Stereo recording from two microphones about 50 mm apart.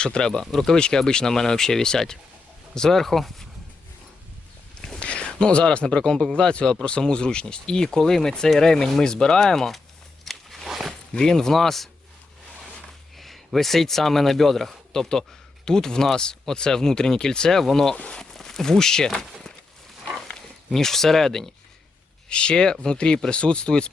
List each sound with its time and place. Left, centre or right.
0.0 s speech: centre
0.5 s speech: centre
0.8 s speech: centre
4.9 s speech: left; by 9.8 s centre
10.2 s walk: centre
11.1 s speech: centre
13.1 s speech: centre
18.0 s speech: centre
18.3 s speech: centre
20.7 s speech: centre
22.3 s speech: centre